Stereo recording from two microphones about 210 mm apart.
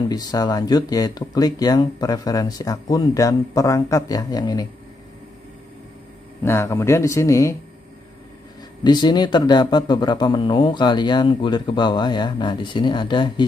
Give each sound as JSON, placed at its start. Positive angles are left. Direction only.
{"t": 0.1, "sound": "speech", "side_deg": 20}
{"t": 6.4, "sound": "speech", "side_deg": 10}
{"t": 8.8, "sound": "speech", "side_deg": 20}